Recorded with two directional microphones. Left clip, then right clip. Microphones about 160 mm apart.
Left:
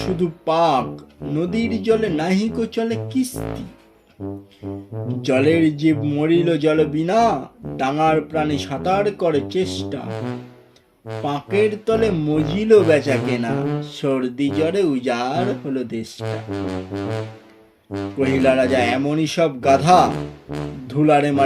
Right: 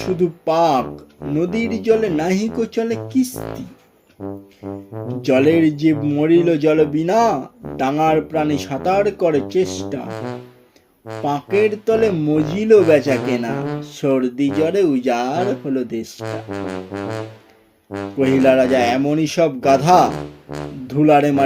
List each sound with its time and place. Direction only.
0.2 s speech: 30° right (ahead or behind)
3.3 s brass instrument: 10° right (ahead or behind)
5.2 s speech: 35° right (ahead or behind)
10.1 s music: centre (ahead or behind)
11.2 s speech: 35° right (ahead or behind)
16.6 s music: centre (ahead or behind)
18.2 s speech: 35° right (ahead or behind)
20.5 s music: centre (ahead or behind)
20.8 s speech: 35° right (ahead or behind)